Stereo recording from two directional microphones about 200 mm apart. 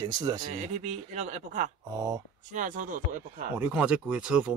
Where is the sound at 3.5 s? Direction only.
5° right (ahead or behind).